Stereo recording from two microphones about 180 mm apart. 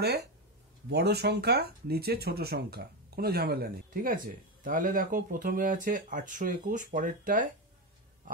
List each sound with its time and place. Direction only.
0.0 s speech: 65° right (ahead or behind); by 7.4 s 45° right (ahead or behind)